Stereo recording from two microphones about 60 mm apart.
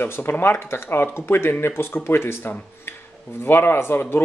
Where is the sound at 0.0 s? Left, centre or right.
Left.